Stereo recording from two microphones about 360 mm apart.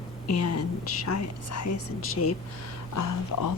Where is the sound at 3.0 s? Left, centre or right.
Left.